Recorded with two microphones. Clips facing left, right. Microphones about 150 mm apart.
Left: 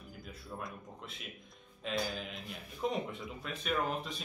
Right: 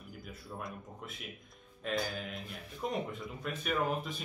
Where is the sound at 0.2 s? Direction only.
Centre (ahead or behind).